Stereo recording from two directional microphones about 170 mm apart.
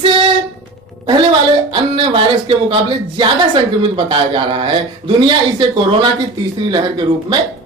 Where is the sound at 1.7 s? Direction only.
30° right (ahead or behind).